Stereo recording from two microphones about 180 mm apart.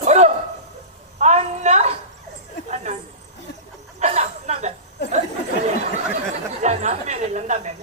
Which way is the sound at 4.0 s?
35° right (ahead or behind).